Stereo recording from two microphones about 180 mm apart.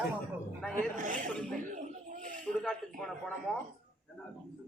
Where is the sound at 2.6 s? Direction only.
5° left (ahead or behind).